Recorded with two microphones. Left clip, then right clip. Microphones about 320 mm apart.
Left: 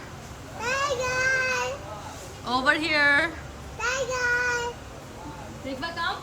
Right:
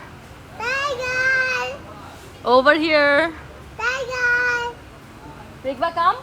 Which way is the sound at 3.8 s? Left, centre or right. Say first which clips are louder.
Right 5 dB; right.